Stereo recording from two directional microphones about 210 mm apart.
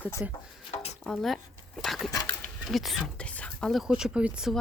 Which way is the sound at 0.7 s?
30° left (ahead or behind).